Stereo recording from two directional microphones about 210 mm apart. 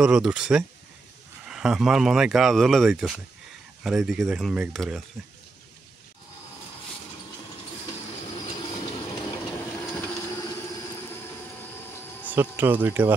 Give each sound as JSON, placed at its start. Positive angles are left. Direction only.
{"t": 0.0, "sound": "speech", "side_deg": -5}
{"t": 8.5, "sound": "train", "side_deg": 25}
{"t": 10.0, "sound": "vehicle", "side_deg": 15}
{"t": 11.8, "sound": "a sound", "side_deg": 10}
{"t": 12.3, "sound": "speech", "side_deg": -10}